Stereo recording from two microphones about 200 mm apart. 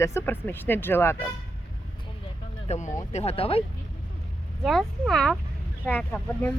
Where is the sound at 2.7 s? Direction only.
35° left (ahead or behind).